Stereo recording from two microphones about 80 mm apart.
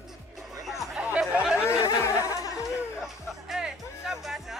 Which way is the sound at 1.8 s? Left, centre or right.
Left.